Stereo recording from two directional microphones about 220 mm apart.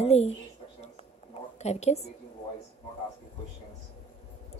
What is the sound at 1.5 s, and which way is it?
Speech, 30° left (ahead or behind).